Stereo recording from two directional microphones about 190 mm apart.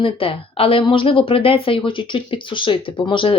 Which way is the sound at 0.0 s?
30° left (ahead or behind).